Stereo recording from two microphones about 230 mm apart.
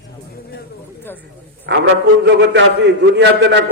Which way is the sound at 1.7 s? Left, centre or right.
Right.